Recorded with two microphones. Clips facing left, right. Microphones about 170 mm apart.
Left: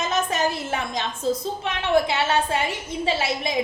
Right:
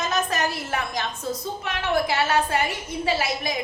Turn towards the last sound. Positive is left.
turn(degrees=25)  # may be behind; listen again after turning